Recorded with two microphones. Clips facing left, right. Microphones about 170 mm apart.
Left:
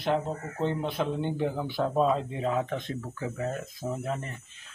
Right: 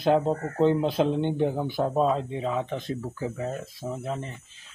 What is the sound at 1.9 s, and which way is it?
Speech, centre (ahead or behind).